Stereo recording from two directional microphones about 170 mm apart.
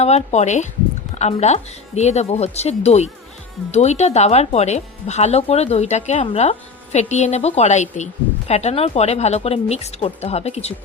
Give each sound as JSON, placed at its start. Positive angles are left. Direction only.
{"t": 0.0, "sound": "speech", "side_deg": 40}